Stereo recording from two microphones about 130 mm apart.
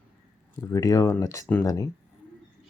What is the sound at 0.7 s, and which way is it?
Speech, 25° left (ahead or behind).